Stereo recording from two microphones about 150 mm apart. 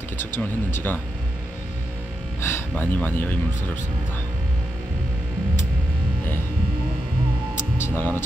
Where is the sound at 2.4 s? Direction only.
15° left (ahead or behind).